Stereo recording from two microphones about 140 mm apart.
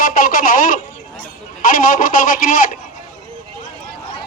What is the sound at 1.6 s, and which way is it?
Speech, 80° left.